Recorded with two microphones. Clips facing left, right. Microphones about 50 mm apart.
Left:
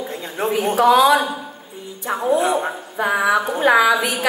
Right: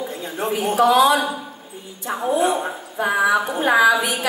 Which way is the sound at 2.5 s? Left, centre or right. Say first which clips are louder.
Left 2 dB; centre.